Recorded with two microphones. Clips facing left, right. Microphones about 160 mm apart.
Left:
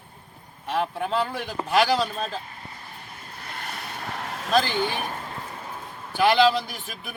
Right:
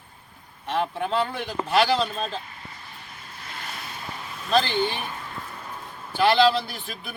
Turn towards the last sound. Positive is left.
turn(degrees=10)  # may be behind; listen again after turning